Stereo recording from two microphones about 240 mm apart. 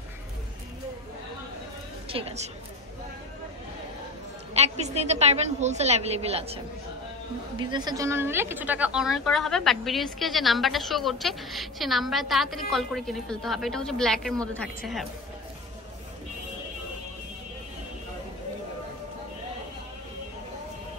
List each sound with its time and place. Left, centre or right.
2.0 s a woman's voice: right
4.6 s a woman's voice: right; by 14.7 s centre